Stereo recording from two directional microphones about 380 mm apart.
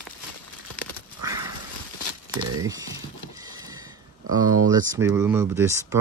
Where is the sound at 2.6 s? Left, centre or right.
Centre.